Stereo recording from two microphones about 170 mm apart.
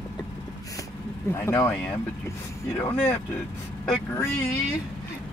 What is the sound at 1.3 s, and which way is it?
Speech, 15° left (ahead or behind).